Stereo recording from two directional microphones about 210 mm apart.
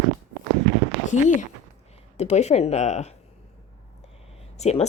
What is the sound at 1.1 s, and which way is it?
A woman's voice, 35° left (ahead or behind).